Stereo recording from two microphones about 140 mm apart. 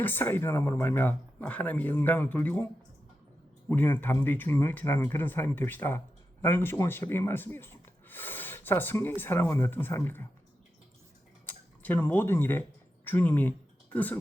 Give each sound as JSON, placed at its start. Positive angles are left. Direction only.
{"t": 0.0, "sound": "speech", "side_deg": 15}
{"t": 3.7, "sound": "speech", "side_deg": 15}
{"t": 11.4, "sound": "speech", "side_deg": 15}